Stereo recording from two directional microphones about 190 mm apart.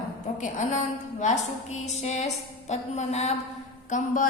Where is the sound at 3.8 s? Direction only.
40° left (ahead or behind).